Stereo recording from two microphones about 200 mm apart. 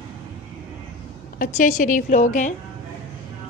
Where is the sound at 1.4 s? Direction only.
40° left (ahead or behind).